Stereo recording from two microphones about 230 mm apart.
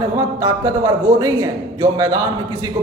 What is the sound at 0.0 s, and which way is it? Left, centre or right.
A man's voice, centre.